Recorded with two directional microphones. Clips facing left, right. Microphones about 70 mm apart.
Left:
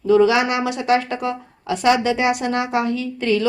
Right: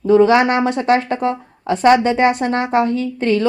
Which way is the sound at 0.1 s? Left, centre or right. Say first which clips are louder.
Right 3 dB; right.